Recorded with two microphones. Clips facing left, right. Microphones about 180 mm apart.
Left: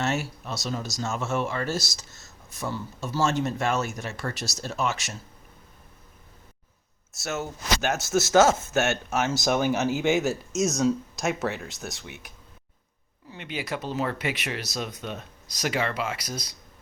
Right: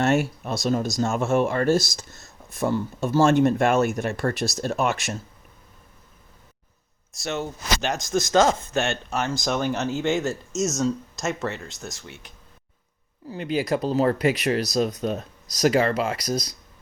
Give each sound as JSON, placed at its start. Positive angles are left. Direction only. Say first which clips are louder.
{"t": 0.0, "sound": "speech", "louder": "right 7 dB", "side_deg": -55}
{"t": 7.1, "sound": "speech", "louder": "right 2 dB", "side_deg": 5}
{"t": 13.3, "sound": "speech", "louder": "right 8 dB", "side_deg": -40}